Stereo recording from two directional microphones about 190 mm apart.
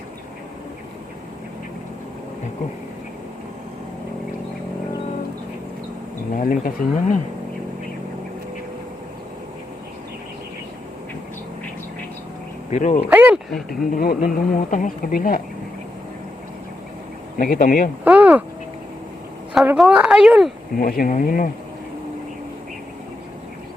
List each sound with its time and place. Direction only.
6.3 s speech: 45° left (ahead or behind)
12.7 s speech: 35° left (ahead or behind)
13.1 s speech: 5° right (ahead or behind)
13.9 s speech: 50° left (ahead or behind)
17.3 s speech: 45° left (ahead or behind)
18.0 s speech: 10° right (ahead or behind)
19.5 s a woman's voice: centre (ahead or behind)
20.7 s speech: 50° left (ahead or behind)